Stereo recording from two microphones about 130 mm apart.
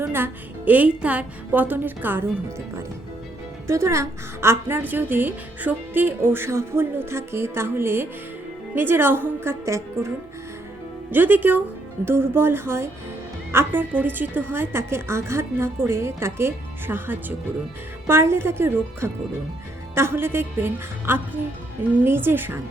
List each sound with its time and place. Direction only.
0.0 s a woman's voice: 15° right (ahead or behind)
3.7 s a woman's voice: 20° right (ahead or behind)
11.1 s a woman's voice: 15° right (ahead or behind)